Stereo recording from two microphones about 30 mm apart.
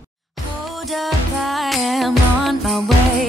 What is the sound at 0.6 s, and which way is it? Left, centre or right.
Music, centre.